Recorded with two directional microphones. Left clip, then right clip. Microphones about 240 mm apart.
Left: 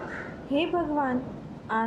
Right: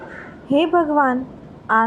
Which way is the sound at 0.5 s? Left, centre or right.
Right.